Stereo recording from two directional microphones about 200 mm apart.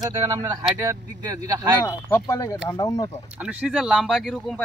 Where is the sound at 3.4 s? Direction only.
5° right (ahead or behind).